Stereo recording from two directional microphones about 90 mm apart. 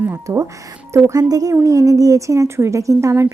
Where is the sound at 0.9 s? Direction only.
40° right (ahead or behind).